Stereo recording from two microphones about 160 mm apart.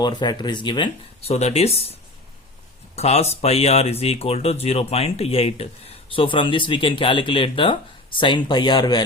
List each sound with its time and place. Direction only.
0.0 s speech: 25° left (ahead or behind)